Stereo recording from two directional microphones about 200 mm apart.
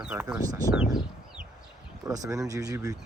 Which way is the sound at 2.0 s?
15° right (ahead or behind).